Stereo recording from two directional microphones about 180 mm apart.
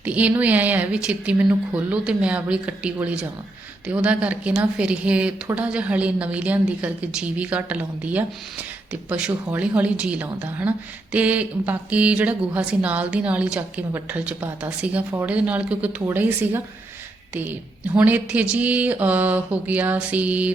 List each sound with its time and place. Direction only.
0.0 s a woman's voice: 10° right (ahead or behind)